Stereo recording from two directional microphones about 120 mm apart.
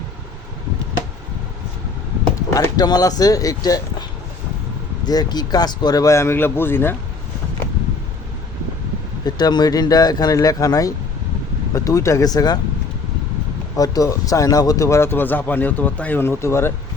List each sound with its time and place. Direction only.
2.3 s speech: 30° left (ahead or behind)
5.0 s speech: 35° left (ahead or behind); by 6.9 s 20° left (ahead or behind)
9.2 s speech: 35° left (ahead or behind)
13.7 s speech: 30° left (ahead or behind)